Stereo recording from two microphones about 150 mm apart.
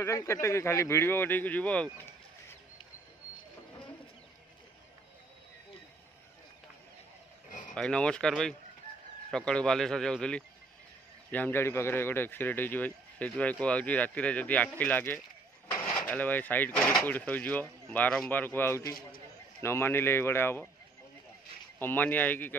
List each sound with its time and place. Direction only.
0.0 s speech: 20° left (ahead or behind)
7.7 s speech: 5° left (ahead or behind)
21.7 s speech: 15° left (ahead or behind)